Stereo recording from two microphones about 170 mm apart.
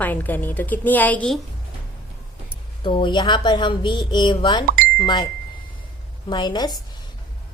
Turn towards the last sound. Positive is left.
turn(degrees=25)  # may be behind; listen again after turning